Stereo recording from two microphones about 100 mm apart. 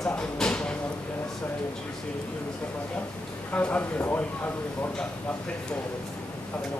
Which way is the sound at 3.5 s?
15° left (ahead or behind).